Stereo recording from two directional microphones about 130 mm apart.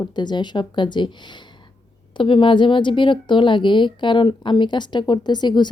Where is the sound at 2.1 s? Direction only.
40° left (ahead or behind).